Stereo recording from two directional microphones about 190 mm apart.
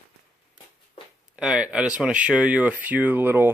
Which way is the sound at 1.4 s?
5° right (ahead or behind).